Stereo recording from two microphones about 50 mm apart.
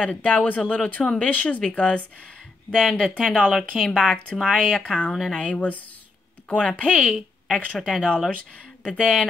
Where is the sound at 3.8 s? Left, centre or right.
Centre.